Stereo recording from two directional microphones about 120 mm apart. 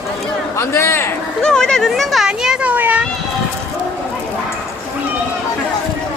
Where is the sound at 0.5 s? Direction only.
20° left (ahead or behind).